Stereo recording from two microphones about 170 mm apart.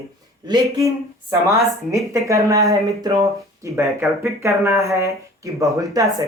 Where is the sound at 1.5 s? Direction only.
20° right (ahead or behind).